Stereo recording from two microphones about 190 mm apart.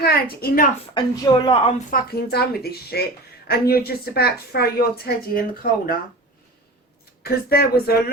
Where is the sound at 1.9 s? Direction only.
55° left (ahead or behind).